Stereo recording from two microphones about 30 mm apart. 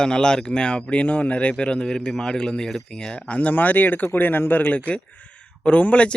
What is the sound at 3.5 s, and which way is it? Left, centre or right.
Speech, left.